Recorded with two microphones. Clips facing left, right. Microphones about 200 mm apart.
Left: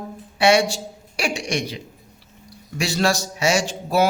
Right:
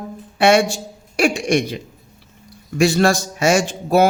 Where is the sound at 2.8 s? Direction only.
50° right (ahead or behind).